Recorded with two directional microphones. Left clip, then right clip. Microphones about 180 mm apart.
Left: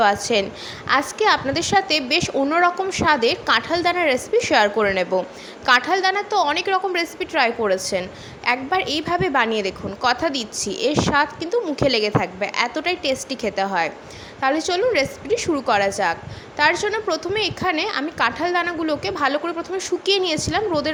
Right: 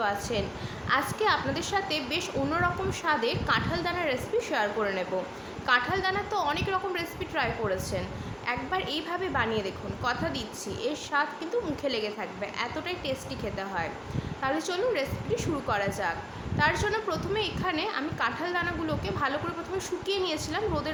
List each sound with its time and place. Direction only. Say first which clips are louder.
0.0 s a woman's voice: left 11 dB; 45° left (ahead or behind)